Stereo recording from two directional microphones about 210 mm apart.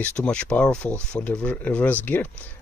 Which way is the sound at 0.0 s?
5° left (ahead or behind).